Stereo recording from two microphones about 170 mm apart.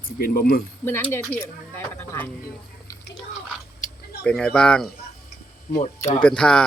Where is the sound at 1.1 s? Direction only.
10° left (ahead or behind).